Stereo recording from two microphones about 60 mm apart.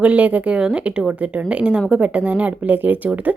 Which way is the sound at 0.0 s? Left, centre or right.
Right.